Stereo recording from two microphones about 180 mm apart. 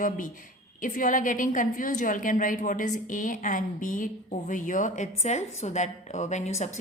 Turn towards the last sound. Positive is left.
turn(degrees=40)  # may be behind; listen again after turning